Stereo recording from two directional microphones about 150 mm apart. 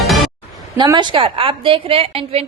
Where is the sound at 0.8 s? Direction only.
30° right (ahead or behind).